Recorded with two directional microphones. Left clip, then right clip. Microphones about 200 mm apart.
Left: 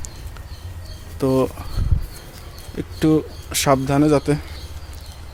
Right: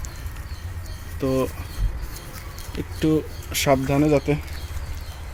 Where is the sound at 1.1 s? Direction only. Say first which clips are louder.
Left 4 dB; 25° left (ahead or behind).